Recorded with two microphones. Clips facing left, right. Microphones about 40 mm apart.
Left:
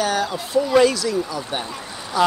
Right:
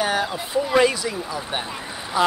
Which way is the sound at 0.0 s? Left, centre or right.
Centre.